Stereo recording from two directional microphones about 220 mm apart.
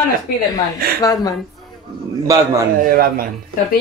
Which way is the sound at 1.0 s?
15° left (ahead or behind).